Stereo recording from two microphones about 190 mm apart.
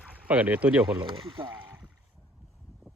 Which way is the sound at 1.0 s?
25° right (ahead or behind).